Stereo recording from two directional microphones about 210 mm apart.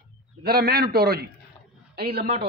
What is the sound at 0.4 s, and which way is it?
A man's voice, 45° right (ahead or behind).